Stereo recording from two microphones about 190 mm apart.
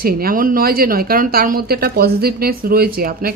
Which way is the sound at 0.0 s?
50° right (ahead or behind).